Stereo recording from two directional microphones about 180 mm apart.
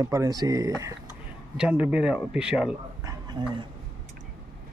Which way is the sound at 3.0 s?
20° right (ahead or behind).